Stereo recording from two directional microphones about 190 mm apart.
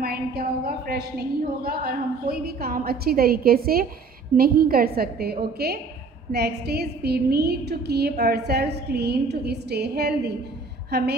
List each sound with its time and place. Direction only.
0.0 s a woman's voice: 55° right (ahead or behind)